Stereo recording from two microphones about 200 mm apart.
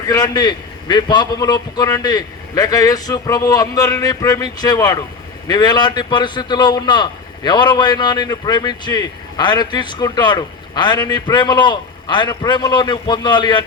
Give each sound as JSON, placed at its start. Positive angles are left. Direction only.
{"t": 0.1, "sound": "a man's voice", "side_deg": 20}